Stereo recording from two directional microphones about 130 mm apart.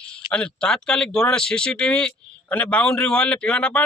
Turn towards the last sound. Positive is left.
turn(degrees=10)  # may be behind; listen again after turning